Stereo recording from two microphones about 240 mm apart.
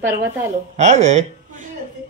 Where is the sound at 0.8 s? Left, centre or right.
Right.